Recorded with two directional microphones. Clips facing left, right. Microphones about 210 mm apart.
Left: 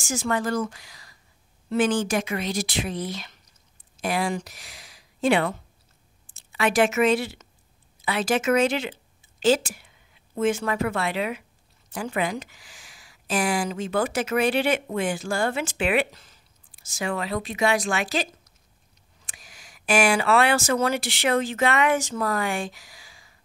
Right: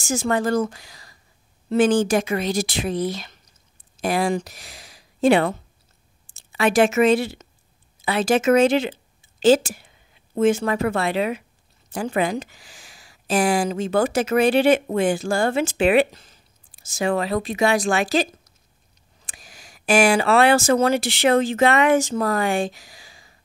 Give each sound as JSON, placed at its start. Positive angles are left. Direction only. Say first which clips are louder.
{"t": 0.0, "sound": "speech", "louder": "right 4 dB", "side_deg": -25}
{"t": 6.5, "sound": "speech", "louder": "right 4 dB", "side_deg": -30}
{"t": 10.3, "sound": "speech", "louder": "right 5 dB", "side_deg": -30}
{"t": 17.1, "sound": "speech", "louder": "right 5 dB", "side_deg": -35}
{"t": 19.2, "sound": "a sound", "louder": "right 3 dB", "side_deg": -35}
{"t": 20.8, "sound": "speech", "louder": "right 5 dB", "side_deg": -25}